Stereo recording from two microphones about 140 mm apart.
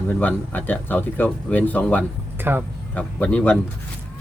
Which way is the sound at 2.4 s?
15° right (ahead or behind).